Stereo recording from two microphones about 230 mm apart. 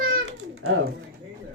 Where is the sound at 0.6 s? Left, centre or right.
Right.